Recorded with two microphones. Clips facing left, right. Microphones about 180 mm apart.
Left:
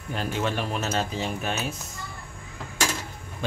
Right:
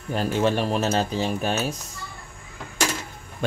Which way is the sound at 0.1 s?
40° right (ahead or behind).